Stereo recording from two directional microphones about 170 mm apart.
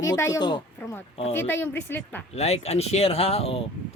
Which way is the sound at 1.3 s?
15° left (ahead or behind).